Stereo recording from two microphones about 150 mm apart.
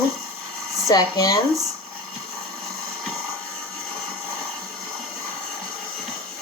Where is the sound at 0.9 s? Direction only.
25° left (ahead or behind).